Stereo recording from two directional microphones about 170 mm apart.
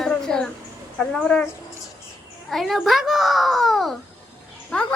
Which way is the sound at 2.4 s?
Centre (ahead or behind).